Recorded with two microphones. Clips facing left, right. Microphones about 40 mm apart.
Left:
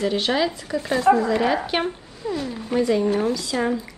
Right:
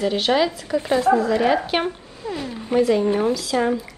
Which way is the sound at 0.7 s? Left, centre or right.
Centre.